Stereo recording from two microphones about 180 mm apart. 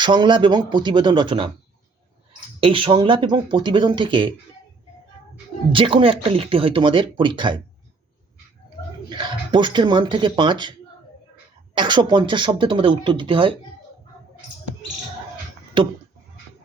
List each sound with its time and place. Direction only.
0.0 s speech: 25° right (ahead or behind)
2.6 s speech: 30° right (ahead or behind)
5.7 s speech: 30° right (ahead or behind)
9.0 s speech: 25° right (ahead or behind)